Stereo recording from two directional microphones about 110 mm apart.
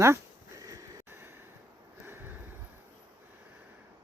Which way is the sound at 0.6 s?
30° right (ahead or behind).